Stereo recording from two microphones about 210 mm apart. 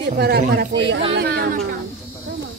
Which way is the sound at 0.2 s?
50° right (ahead or behind).